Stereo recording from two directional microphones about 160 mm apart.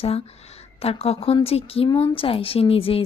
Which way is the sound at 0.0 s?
40° left (ahead or behind).